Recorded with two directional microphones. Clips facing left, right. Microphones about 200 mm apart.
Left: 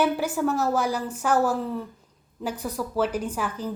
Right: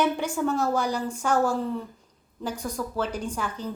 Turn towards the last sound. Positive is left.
turn(degrees=5)  # may be behind; listen again after turning